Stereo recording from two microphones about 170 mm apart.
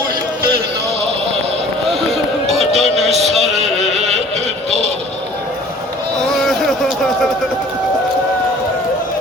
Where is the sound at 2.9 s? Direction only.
40° right (ahead or behind).